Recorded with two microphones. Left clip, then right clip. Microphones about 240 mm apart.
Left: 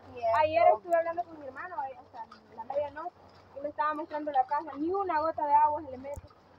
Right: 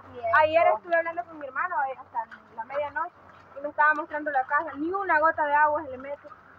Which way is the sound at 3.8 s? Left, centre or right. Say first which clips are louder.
Right 9 dB; centre.